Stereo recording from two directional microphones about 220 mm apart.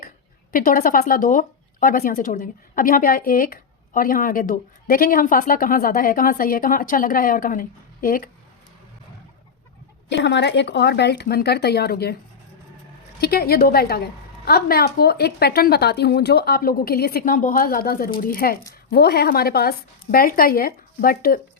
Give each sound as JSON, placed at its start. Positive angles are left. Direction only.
{"t": 0.5, "sound": "speech", "side_deg": 40}
{"t": 10.1, "sound": "a woman's voice", "side_deg": 55}
{"t": 13.1, "sound": "a woman's voice", "side_deg": 45}